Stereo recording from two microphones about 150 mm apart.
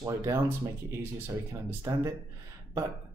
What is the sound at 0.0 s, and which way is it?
Speech, 20° right (ahead or behind).